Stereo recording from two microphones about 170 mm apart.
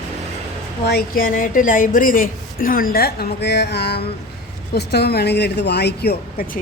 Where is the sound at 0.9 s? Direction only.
65° left (ahead or behind).